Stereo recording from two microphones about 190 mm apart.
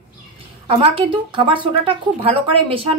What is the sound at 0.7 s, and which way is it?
Speech, 30° right (ahead or behind).